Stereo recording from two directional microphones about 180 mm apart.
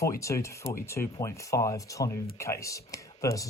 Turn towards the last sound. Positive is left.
turn(degrees=20)  # may be behind; listen again after turning